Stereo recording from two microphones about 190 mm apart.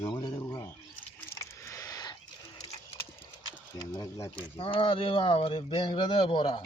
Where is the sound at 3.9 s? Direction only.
15° left (ahead or behind).